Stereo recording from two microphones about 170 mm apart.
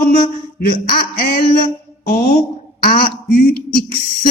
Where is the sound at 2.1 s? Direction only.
45° left (ahead or behind).